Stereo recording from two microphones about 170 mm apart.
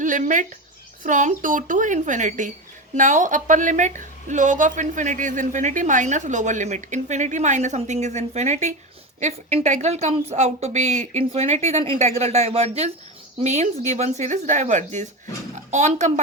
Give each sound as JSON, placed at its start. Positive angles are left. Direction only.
{"t": 0.0, "sound": "a woman's voice", "side_deg": -50}